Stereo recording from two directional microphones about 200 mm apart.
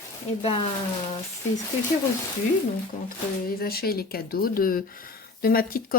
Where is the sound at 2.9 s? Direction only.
40° left (ahead or behind).